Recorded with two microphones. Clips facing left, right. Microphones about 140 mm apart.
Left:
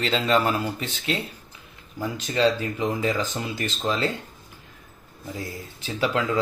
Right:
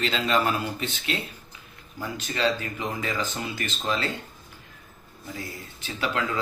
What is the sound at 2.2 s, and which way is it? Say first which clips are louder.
Speech: left 4 dB; 30° left (ahead or behind).